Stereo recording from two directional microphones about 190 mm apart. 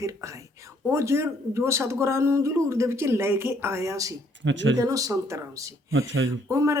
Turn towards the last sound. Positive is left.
turn(degrees=-15)  # may be behind; listen again after turning